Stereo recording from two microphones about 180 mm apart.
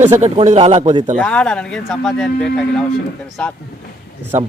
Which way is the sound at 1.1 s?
5° left (ahead or behind).